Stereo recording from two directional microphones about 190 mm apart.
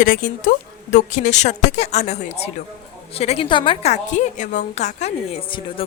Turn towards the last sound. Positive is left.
turn(degrees=30)  # may be behind; listen again after turning